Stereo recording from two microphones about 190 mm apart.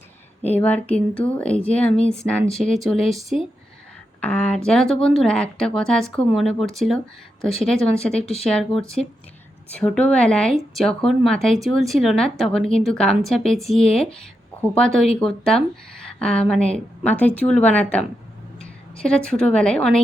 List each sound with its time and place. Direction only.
0.5 s a woman's voice: 10° left (ahead or behind)